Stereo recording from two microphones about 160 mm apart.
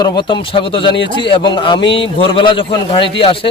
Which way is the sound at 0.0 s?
30° left (ahead or behind).